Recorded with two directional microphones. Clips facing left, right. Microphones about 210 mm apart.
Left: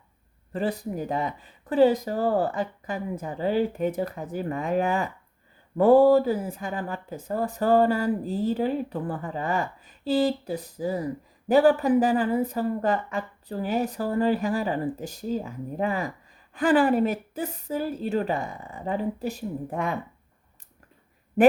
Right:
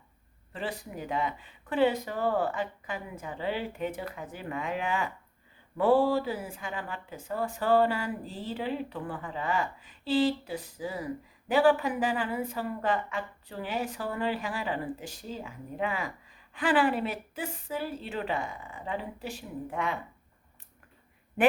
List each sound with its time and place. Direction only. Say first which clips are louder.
0.5 s speech: left 8 dB; 40° left (ahead or behind)